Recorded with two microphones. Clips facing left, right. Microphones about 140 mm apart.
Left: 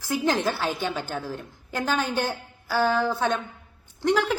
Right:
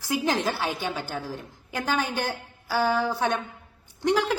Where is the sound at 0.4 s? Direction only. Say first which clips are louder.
Left 1 dB; 15° right (ahead or behind).